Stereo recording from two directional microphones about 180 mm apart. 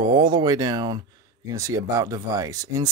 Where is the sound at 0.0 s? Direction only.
25° right (ahead or behind).